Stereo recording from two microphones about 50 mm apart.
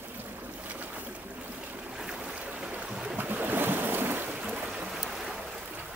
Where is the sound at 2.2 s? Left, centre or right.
Right.